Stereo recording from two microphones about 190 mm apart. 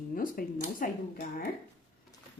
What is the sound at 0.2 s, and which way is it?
Speech, 45° left (ahead or behind).